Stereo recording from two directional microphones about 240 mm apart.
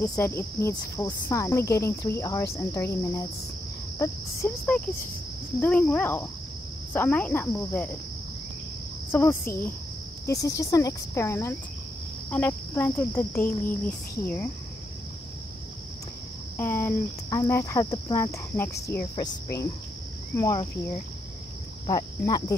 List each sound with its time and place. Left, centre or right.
0.1 s cricket: centre
4.4 s cricket: centre
9.1 s cricket: centre
16.5 s cricket: centre
21.8 s cricket: centre